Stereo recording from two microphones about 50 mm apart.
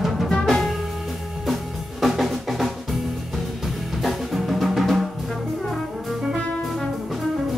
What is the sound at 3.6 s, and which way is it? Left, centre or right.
Drum, centre.